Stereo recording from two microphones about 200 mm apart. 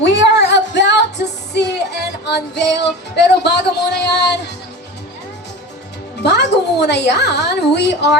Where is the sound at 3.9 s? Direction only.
55° left (ahead or behind).